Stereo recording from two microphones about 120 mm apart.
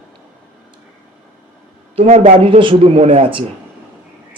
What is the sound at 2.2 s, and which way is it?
Speech, 50° right (ahead or behind).